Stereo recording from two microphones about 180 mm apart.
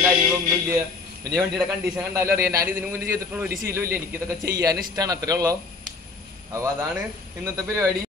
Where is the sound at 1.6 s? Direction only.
10° right (ahead or behind).